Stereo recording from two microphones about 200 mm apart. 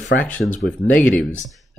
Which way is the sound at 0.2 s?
5° left (ahead or behind).